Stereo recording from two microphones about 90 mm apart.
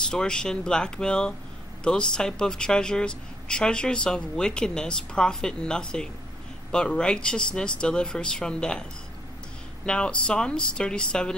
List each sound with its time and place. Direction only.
0.1 s speech: 10° left (ahead or behind)
9.8 s speech: 10° left (ahead or behind)